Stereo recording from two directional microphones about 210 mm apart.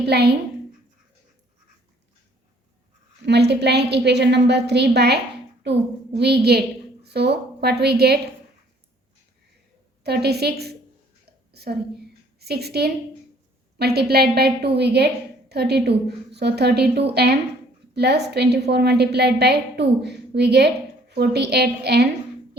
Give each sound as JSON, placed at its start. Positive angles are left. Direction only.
{"t": 0.0, "sound": "a woman's voice", "side_deg": -50}
{"t": 3.2, "sound": "a woman's voice", "side_deg": -55}
{"t": 10.0, "sound": "a woman's voice", "side_deg": -50}